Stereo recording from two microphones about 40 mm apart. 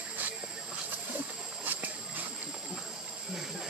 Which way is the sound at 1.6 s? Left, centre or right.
Right.